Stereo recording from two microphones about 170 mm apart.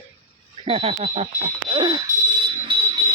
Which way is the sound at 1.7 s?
25° right (ahead or behind).